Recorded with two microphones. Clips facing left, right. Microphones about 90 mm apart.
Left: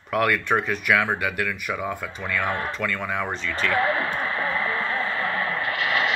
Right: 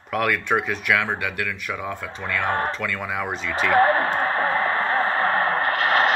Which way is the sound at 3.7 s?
45° right (ahead or behind).